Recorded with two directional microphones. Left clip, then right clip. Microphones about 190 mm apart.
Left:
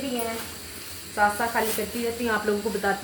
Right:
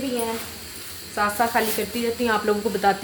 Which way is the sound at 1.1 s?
55° right (ahead or behind).